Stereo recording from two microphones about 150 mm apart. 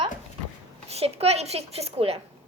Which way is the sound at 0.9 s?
45° right (ahead or behind).